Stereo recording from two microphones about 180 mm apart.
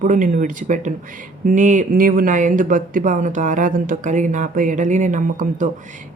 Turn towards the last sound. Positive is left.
turn(degrees=-45)  # may be behind; listen again after turning